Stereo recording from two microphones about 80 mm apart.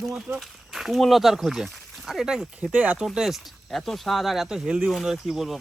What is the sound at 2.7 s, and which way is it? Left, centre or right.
Speech, centre.